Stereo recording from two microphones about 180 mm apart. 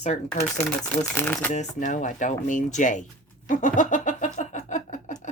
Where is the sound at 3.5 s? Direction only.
45° left (ahead or behind).